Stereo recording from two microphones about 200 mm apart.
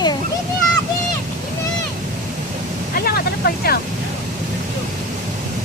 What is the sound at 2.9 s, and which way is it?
Speech, 50° left (ahead or behind).